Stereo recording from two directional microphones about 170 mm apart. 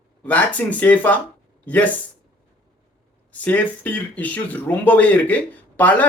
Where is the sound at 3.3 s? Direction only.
10° left (ahead or behind).